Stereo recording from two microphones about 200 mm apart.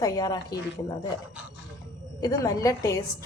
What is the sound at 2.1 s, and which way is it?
Speech, 20° left (ahead or behind).